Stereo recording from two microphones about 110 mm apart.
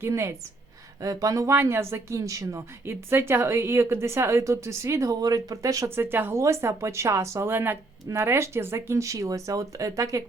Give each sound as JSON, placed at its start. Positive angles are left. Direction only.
{"t": 0.0, "sound": "speech", "side_deg": -25}